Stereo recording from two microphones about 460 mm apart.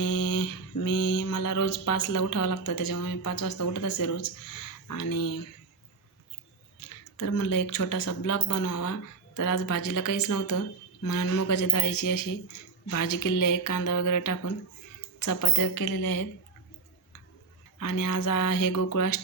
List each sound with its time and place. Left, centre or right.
0.0 s mantra: left
4.9 s speech: left
6.8 s a sound: left
7.2 s speech: left
17.7 s speech: left